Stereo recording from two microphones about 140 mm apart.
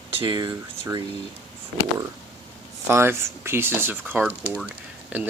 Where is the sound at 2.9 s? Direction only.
15° right (ahead or behind).